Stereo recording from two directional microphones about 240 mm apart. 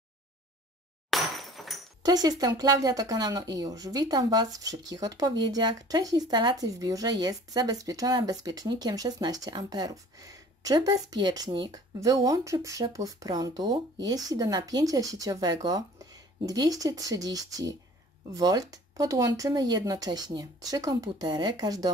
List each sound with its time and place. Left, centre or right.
1.1 s breaking: centre
2.0 s speech: centre